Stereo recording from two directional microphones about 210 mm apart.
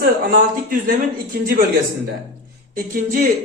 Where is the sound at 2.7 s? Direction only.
45° right (ahead or behind).